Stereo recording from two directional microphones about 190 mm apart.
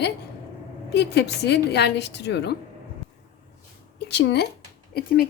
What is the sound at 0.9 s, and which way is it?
A woman's voice, 60° left (ahead or behind).